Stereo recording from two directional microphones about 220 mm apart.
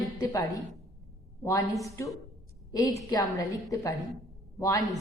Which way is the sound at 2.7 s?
15° left (ahead or behind).